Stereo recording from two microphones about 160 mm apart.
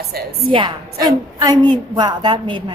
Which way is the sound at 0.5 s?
30° right (ahead or behind).